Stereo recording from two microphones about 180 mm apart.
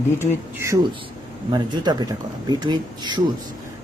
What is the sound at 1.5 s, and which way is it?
Speech, 25° right (ahead or behind).